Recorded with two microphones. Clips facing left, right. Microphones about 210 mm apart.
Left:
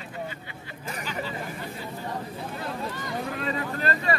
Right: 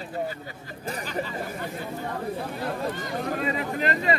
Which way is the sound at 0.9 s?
35° right (ahead or behind).